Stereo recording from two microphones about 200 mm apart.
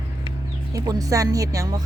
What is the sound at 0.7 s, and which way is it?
Speech, 20° right (ahead or behind).